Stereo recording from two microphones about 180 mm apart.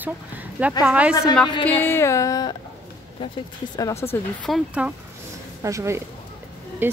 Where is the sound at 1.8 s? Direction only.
15° left (ahead or behind).